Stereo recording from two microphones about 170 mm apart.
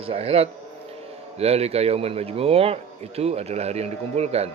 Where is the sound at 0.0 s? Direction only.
35° right (ahead or behind).